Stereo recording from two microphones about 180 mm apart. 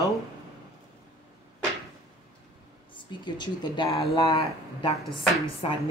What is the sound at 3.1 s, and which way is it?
Speech, 25° left (ahead or behind).